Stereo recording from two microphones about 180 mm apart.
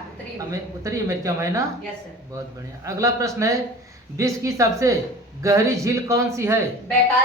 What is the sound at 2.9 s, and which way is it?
Speech, 15° right (ahead or behind).